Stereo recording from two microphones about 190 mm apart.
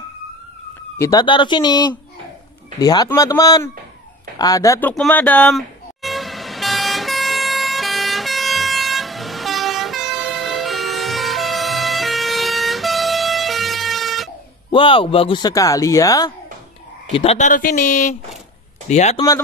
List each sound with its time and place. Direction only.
0.9 s speech: 15° left (ahead or behind)
4.4 s a sound: 20° left (ahead or behind); by 14.3 s centre (ahead or behind)
14.7 s speech: 25° left (ahead or behind)
17.1 s speech: 30° left (ahead or behind)
19.1 s speech: 20° left (ahead or behind)